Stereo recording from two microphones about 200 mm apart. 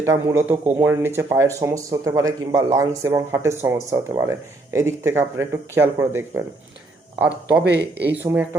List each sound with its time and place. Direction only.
0.0 s speech: 15° right (ahead or behind)
7.6 s speech: 55° right (ahead or behind)
8.2 s speech: 10° right (ahead or behind)